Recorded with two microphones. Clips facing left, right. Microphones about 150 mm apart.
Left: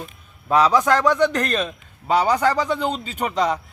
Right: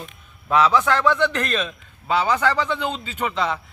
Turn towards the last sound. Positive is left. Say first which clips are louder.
# left 3 dB
turn(degrees=40)  # may be behind; listen again after turning